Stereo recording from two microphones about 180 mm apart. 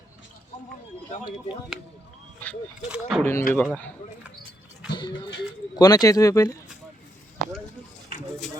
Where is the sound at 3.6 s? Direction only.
10° left (ahead or behind).